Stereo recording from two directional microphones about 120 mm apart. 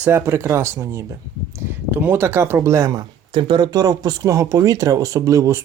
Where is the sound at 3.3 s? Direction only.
40° right (ahead or behind).